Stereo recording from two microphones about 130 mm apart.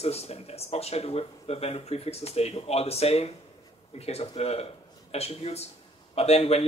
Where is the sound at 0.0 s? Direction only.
55° left (ahead or behind).